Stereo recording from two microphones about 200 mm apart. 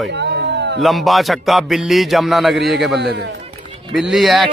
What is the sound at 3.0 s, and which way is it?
Speech, 60° right (ahead or behind).